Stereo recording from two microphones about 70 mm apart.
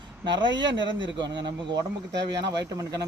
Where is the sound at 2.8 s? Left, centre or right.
Right.